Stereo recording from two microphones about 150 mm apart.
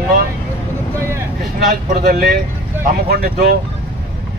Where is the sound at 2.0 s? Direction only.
75° right (ahead or behind).